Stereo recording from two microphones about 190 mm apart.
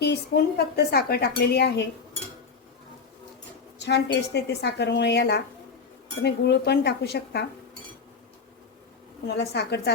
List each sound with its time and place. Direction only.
0.0 s a woman's voice: 60° left (ahead or behind)
3.8 s a woman's voice: 65° left (ahead or behind)
9.2 s a woman's voice: 65° left (ahead or behind)